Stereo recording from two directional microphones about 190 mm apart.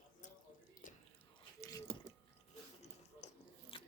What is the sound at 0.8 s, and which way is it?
Biting, 40° left (ahead or behind).